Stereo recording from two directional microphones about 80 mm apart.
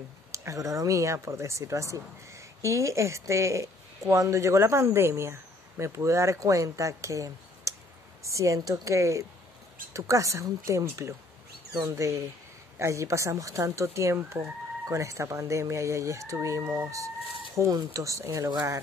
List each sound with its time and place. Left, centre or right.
0.3 s speech: right